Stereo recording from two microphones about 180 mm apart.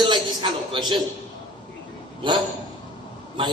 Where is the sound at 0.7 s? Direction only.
25° right (ahead or behind).